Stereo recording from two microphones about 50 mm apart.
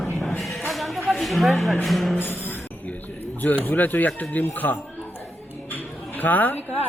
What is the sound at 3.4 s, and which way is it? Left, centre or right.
Speech, left.